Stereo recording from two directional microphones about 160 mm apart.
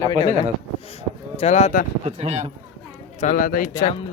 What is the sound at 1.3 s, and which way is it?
Speech, 40° left (ahead or behind).